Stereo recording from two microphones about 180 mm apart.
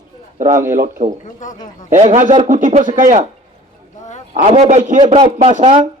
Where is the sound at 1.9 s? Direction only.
40° right (ahead or behind).